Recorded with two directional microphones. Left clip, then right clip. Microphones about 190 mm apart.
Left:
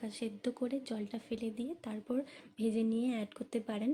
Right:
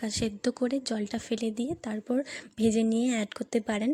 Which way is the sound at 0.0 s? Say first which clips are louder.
Right 9 dB; 35° right (ahead or behind).